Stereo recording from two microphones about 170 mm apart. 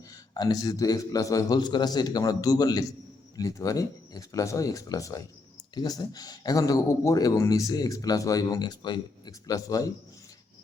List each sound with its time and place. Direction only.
0.3 s speech: 20° left (ahead or behind)